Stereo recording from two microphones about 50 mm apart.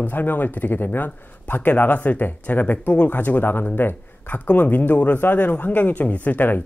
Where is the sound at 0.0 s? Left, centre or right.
Left.